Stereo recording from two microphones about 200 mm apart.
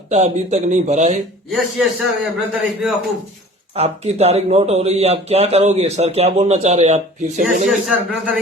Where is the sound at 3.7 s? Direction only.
30° right (ahead or behind).